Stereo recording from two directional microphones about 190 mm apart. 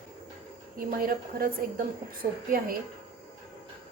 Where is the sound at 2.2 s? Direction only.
40° right (ahead or behind).